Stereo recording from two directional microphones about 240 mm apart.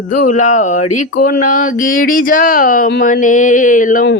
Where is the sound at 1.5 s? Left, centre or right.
Left.